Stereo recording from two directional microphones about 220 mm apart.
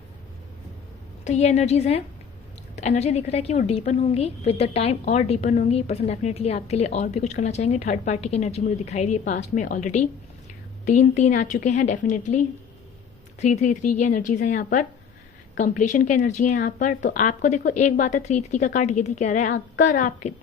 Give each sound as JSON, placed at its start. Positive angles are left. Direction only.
{"t": 1.2, "sound": "a woman's voice", "side_deg": 30}
{"t": 13.4, "sound": "a woman's voice", "side_deg": 35}